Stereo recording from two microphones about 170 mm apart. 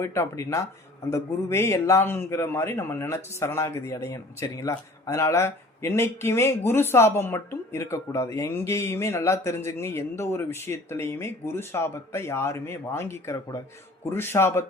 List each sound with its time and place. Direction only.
0.0 s a man's voice: 15° left (ahead or behind)